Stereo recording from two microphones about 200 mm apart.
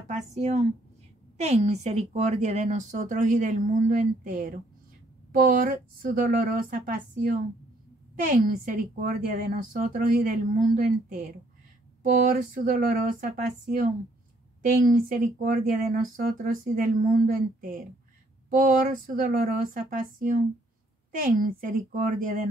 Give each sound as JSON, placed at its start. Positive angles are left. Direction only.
{"t": 0.1, "sound": "a woman's voice", "side_deg": -35}
{"t": 12.0, "sound": "a woman's voice", "side_deg": -40}